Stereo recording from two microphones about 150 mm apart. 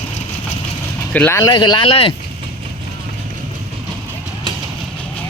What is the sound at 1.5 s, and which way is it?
Speech, 30° left (ahead or behind).